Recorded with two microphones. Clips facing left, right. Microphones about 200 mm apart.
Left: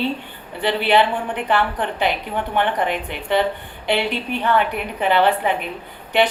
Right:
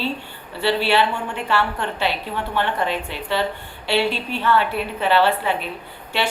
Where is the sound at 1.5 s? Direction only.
15° left (ahead or behind).